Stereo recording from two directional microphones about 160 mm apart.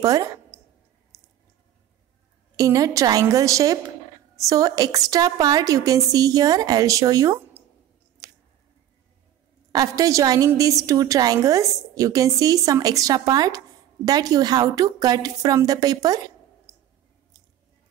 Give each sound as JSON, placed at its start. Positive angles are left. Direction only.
{"t": 0.0, "sound": "speech", "side_deg": -20}
{"t": 2.5, "sound": "a woman's voice", "side_deg": -20}
{"t": 8.2, "sound": "squish", "side_deg": -20}
{"t": 9.7, "sound": "a woman's voice", "side_deg": -20}